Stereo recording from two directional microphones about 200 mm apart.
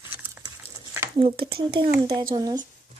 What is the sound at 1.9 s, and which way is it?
Speech, 15° right (ahead or behind).